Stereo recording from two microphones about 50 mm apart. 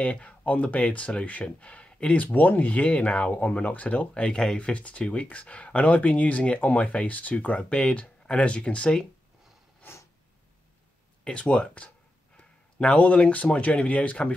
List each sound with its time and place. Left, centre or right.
0.0 s speech: left
11.2 s speech: left